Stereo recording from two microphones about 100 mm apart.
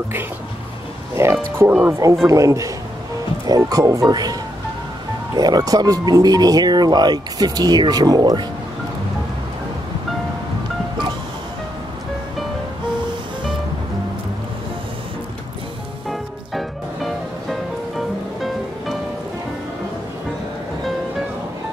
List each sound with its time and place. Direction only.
1.1 s speech: 25° right (ahead or behind)
1.7 s speech: 15° right (ahead or behind)
2.2 s speech: 30° right (ahead or behind)
16.1 s music: centre (ahead or behind)